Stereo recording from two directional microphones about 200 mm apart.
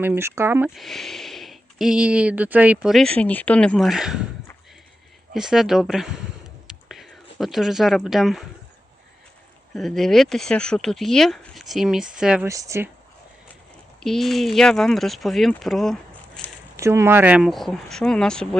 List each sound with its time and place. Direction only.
0.0 s speech: 10° right (ahead or behind)
0.8 s speech: centre (ahead or behind)
5.3 s speech: centre (ahead or behind)
6.7 s whispering: centre (ahead or behind)
9.7 s speech: centre (ahead or behind)
12.5 s speech: 15° right (ahead or behind)
14.0 s speech: centre (ahead or behind)
16.7 s speech: 15° right (ahead or behind); by 18.4 s 5° left (ahead or behind)